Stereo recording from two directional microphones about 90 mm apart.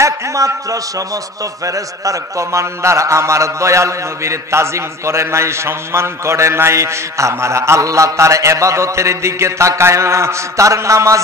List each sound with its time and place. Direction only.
0.0 s a man's voice: 35° right (ahead or behind)